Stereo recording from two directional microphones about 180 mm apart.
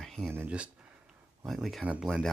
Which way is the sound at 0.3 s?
10° right (ahead or behind).